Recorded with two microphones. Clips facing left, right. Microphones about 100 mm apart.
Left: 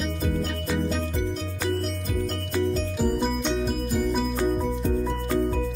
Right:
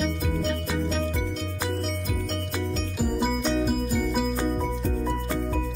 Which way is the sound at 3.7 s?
5° right (ahead or behind).